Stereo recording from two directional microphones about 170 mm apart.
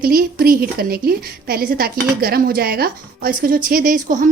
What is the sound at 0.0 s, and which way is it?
A woman's voice, 60° right (ahead or behind).